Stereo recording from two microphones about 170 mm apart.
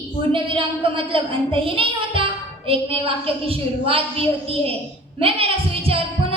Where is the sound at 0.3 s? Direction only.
30° right (ahead or behind).